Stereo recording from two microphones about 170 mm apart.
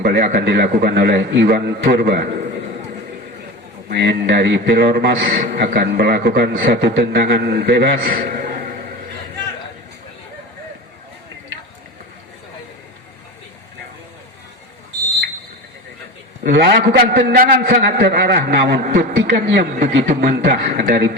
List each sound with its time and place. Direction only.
0.0 s a man's voice: 70° right (ahead or behind)
3.8 s a man's voice: 70° right (ahead or behind)
6.5 s a man's voice: 55° right (ahead or behind)
6.8 s a man's voice: 85° right; by 8.4 s 55° right (ahead or behind)
16.4 s a man's voice: 90° right; by 19.0 s 65° right (ahead or behind)
19.3 s speech: 85° right
19.9 s a man's voice: 75° right (ahead or behind)